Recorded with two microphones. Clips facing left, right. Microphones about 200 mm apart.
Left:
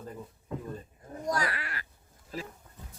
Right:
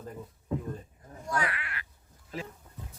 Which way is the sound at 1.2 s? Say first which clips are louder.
Left 1 dB; 40° left (ahead or behind).